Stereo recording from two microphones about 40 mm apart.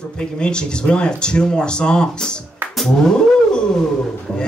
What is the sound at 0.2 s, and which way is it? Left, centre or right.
Speech, left.